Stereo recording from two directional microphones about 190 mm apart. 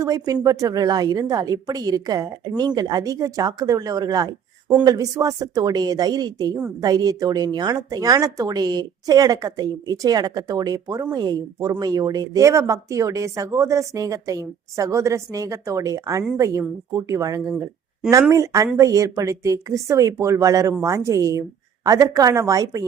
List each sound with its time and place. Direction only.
0.0 s a woman's voice: 20° right (ahead or behind)